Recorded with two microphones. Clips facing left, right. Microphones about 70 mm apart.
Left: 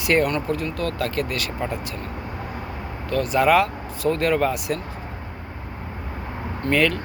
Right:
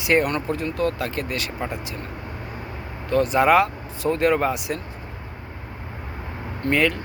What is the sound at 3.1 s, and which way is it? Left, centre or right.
Speech, right.